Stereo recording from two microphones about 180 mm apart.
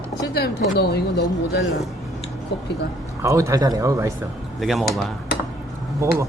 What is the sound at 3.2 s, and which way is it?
Speech, 15° right (ahead or behind).